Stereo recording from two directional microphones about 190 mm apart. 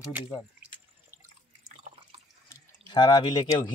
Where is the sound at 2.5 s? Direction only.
20° left (ahead or behind).